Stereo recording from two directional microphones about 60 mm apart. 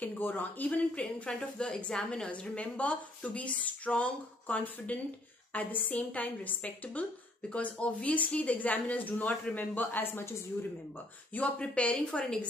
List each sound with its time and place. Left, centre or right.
0.0 s speech: left
11.3 s speech: left